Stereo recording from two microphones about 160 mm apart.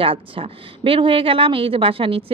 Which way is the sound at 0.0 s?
35° right (ahead or behind).